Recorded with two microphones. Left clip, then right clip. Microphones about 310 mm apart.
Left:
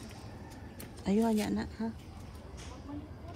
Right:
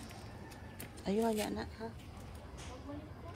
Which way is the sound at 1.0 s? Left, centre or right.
Centre.